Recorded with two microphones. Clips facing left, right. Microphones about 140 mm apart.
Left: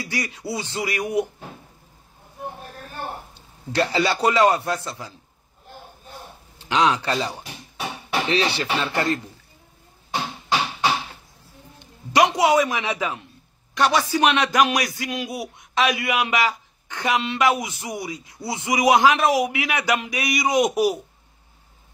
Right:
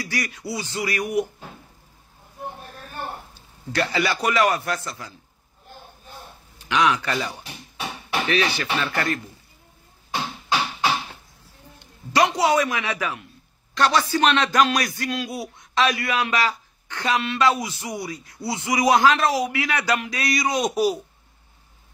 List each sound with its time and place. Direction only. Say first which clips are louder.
0.0 s a man's voice: even; 25° left (ahead or behind)
3.3 s a man's voice: left 3 dB; 25° left (ahead or behind)
6.6 s speech: left 1 dB; 30° left (ahead or behind)
8.7 s a man's voice: left 2 dB; 20° left (ahead or behind)
11.8 s a man's voice: left 2 dB; 20° left (ahead or behind)